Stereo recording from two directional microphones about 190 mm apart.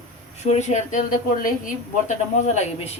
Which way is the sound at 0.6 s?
35° left (ahead or behind).